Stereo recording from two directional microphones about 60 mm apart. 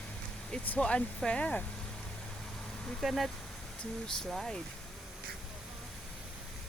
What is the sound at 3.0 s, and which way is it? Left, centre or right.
Speech, centre.